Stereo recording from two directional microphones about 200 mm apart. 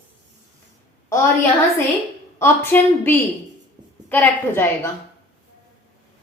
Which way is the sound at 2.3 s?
10° left (ahead or behind).